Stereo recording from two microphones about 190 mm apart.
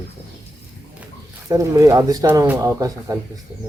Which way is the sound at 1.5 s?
15° right (ahead or behind).